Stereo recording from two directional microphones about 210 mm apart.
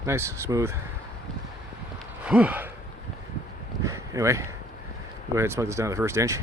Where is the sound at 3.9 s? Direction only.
15° right (ahead or behind).